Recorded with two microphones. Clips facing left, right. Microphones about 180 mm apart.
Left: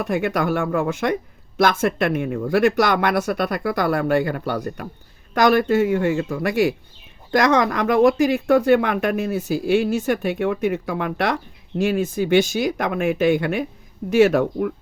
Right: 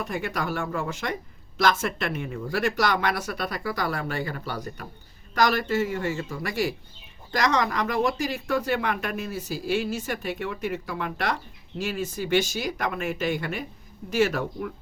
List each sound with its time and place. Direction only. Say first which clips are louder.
0.0 s speech: left 8 dB; 55° left (ahead or behind)